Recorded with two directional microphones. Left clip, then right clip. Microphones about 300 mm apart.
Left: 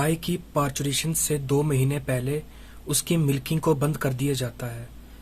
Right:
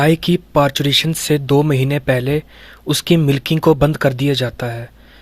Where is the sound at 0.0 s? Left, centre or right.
Right.